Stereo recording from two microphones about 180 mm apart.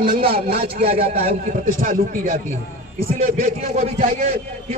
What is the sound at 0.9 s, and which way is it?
A man's voice, 50° right (ahead or behind).